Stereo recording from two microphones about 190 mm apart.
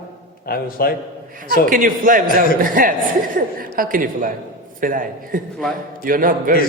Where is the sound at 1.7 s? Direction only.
45° right (ahead or behind).